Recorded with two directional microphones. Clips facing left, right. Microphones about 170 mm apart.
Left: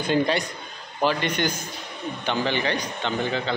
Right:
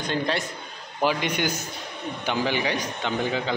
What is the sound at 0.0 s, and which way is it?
Speech, 5° left (ahead or behind).